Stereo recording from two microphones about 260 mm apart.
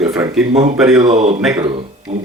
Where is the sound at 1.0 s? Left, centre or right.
Right.